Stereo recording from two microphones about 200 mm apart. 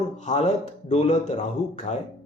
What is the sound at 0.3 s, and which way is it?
Speech, 35° left (ahead or behind).